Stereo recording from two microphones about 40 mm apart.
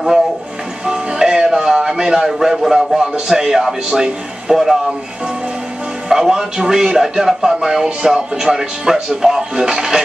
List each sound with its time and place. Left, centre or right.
0.8 s music: centre
2.2 s speech: centre
6.0 s speech: centre